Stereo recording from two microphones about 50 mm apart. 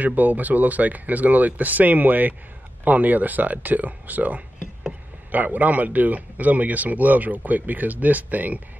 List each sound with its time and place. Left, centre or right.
0.0 s a man's voice: right